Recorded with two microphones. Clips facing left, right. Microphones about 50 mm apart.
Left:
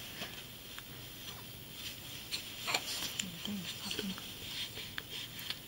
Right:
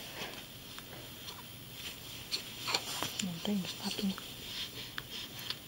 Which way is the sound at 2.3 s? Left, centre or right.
Centre.